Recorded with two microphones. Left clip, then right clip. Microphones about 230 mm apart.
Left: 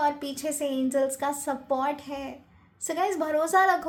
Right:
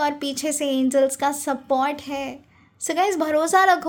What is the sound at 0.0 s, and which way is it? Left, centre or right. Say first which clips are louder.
A woman's voice: right 3 dB; right.